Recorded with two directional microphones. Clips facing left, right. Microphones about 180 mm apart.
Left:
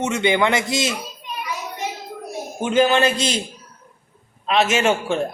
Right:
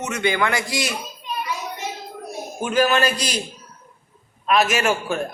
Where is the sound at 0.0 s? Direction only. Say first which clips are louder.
Left 3 dB; 25° left (ahead or behind).